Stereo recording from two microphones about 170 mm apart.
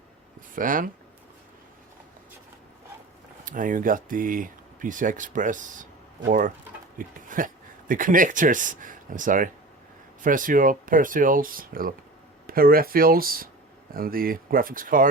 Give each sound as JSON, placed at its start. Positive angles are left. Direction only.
{"t": 0.5, "sound": "speech", "side_deg": -55}
{"t": 3.4, "sound": "speech", "side_deg": -50}